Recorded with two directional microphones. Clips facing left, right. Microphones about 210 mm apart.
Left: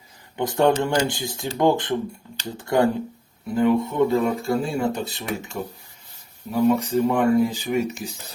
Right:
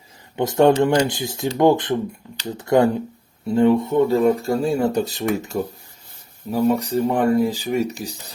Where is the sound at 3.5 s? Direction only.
30° right (ahead or behind).